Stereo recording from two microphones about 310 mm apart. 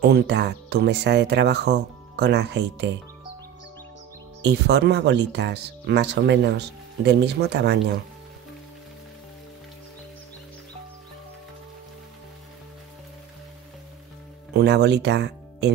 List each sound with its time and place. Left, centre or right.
0.0 s speech: right
4.4 s speech: right
14.5 s speech: right